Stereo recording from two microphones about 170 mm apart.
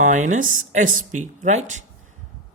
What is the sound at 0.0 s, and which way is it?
Speech, 45° right (ahead or behind).